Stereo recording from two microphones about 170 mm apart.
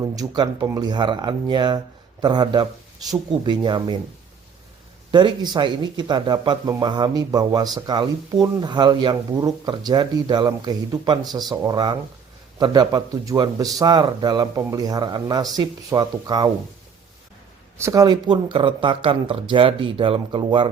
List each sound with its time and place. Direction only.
0.0 s speech: 25° right (ahead or behind)
5.1 s speech: 25° right (ahead or behind)
17.7 s speech: 20° right (ahead or behind)